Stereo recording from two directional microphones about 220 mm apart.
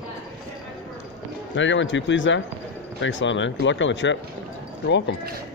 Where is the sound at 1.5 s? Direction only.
55° left (ahead or behind).